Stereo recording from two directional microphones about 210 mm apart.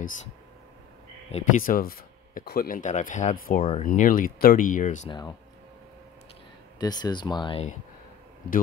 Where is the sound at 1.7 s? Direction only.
45° left (ahead or behind).